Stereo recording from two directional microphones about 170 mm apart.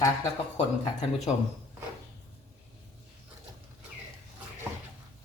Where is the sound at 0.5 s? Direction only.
40° left (ahead or behind).